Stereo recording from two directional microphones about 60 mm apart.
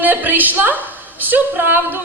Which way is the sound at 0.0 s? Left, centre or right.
Right.